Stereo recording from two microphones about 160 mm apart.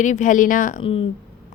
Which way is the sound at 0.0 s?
50° left (ahead or behind).